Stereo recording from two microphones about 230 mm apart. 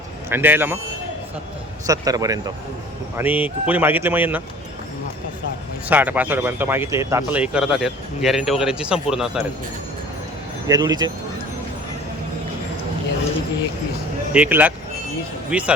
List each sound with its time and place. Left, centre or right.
0.3 s speech: centre
1.9 s speech: centre
5.9 s speech: centre
10.7 s speech: centre
14.3 s speech: centre